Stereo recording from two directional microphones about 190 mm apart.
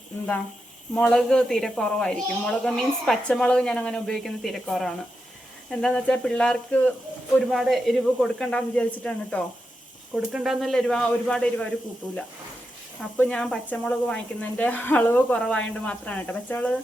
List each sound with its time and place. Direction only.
0.9 s a woman's voice: 5° left (ahead or behind)
13.1 s speech: 5° left (ahead or behind)